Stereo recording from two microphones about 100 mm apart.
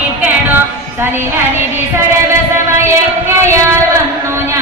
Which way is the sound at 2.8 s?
25° right (ahead or behind).